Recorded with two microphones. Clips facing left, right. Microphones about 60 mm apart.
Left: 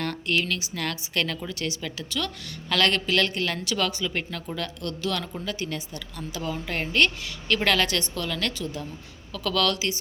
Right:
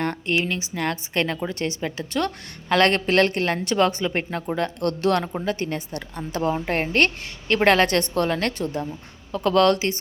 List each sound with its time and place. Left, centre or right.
0.0 s a woman's voice: right
4.8 s a woman's voice: right